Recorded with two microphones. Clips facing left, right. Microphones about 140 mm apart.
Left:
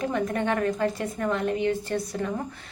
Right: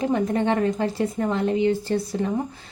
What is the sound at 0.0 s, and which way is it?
A woman's voice, 30° right (ahead or behind).